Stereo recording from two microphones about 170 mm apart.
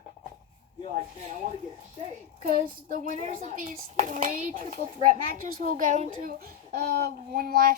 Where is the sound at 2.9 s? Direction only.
50° right (ahead or behind).